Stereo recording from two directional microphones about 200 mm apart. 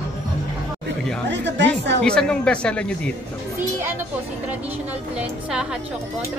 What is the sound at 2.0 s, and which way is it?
Speech, 5° left (ahead or behind).